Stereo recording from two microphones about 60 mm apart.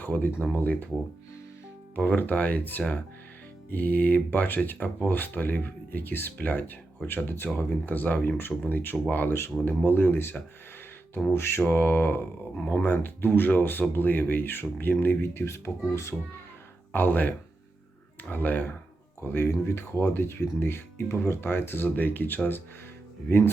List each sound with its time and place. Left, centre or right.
0.0 s speech: left
2.0 s speech: left
11.3 s speech: left
16.9 s speech: left